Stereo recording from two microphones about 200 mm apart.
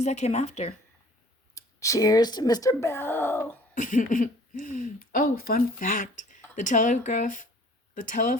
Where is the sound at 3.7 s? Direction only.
40° left (ahead or behind).